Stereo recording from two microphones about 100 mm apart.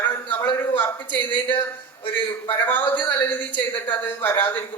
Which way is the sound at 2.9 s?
20° left (ahead or behind).